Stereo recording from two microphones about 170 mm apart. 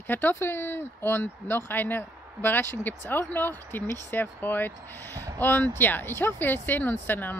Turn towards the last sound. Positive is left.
turn(degrees=10)  # may be behind; listen again after turning